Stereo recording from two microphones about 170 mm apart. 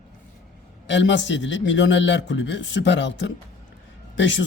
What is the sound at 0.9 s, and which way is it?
Speech, 90° left.